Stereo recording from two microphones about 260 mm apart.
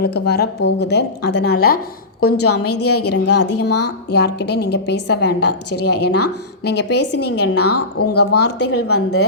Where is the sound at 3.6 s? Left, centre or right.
Left.